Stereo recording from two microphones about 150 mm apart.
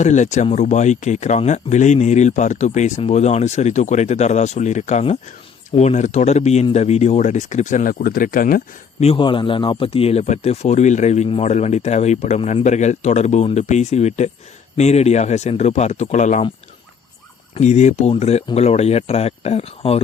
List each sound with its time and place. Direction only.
0.0 s speech: 50° left (ahead or behind); by 8.6 s 70° left (ahead or behind)
9.0 s speech: 40° left (ahead or behind)
17.6 s speech: 50° left (ahead or behind)